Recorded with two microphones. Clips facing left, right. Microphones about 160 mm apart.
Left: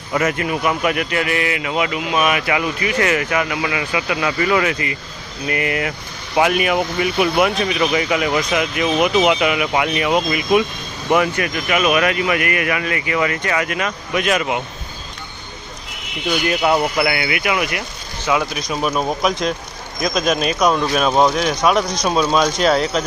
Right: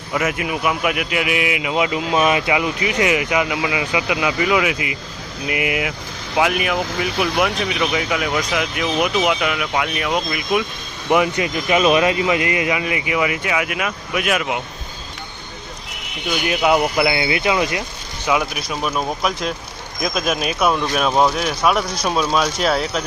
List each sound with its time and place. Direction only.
0.1 s a man's voice: 5° right (ahead or behind)
11.1 s a man's voice: 20° right (ahead or behind); by 14.6 s centre (ahead or behind)
16.5 s speech: 10° right (ahead or behind)
18.3 s a man's voice: 10° right (ahead or behind)
18.7 s speech: 5° left (ahead or behind)
19.2 s speech: 5° right (ahead or behind)